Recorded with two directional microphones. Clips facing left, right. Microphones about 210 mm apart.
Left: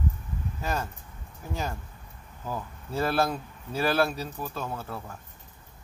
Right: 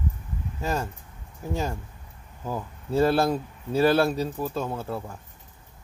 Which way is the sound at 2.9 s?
30° right (ahead or behind).